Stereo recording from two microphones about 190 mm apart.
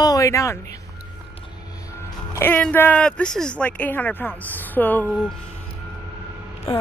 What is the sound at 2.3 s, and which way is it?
Speech, 10° left (ahead or behind).